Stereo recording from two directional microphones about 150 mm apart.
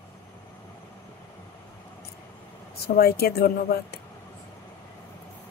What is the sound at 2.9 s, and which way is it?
Speech, 90° left.